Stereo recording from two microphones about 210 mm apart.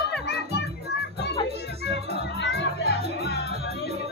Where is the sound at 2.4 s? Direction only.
50° left (ahead or behind).